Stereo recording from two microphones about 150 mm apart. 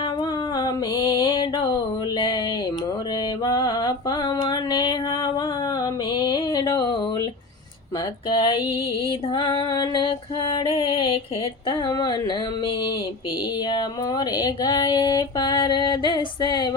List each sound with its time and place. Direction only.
0.0 s music: 30° left (ahead or behind)
3.4 s a sound: 25° left (ahead or behind)
8.3 s female singing: 35° left (ahead or behind)